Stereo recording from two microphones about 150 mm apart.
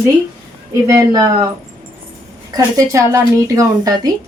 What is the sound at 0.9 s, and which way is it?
Speech, 25° right (ahead or behind).